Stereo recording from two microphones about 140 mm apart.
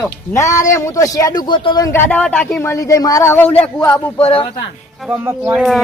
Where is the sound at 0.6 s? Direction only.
25° left (ahead or behind).